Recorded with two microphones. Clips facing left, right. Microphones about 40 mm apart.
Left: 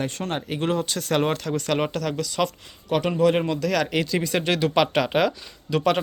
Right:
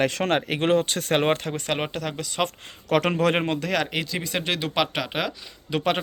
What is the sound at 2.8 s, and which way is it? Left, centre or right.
Speech, right.